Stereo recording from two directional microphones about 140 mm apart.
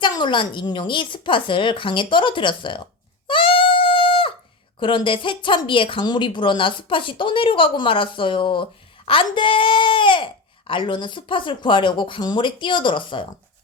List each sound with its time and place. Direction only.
0.0 s a woman's voice: 35° left (ahead or behind)
3.2 s a sound: 40° left (ahead or behind)
4.8 s a woman's voice: 35° left (ahead or behind)